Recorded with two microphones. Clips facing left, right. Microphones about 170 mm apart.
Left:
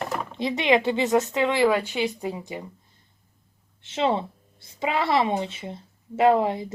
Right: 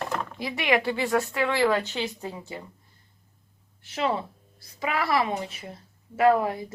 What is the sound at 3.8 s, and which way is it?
A woman's voice, 25° left (ahead or behind).